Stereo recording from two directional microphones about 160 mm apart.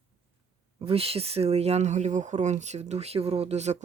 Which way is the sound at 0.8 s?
35° right (ahead or behind).